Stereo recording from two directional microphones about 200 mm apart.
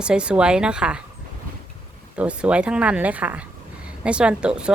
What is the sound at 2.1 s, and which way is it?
A woman's voice, 5° right (ahead or behind).